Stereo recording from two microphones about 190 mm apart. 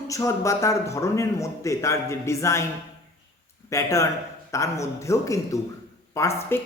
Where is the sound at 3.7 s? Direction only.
15° left (ahead or behind).